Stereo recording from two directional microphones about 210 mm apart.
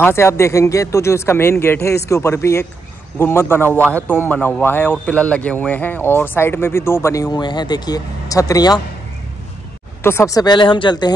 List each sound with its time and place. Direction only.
0.0 s speech: 10° left (ahead or behind)
10.0 s speech: 15° left (ahead or behind)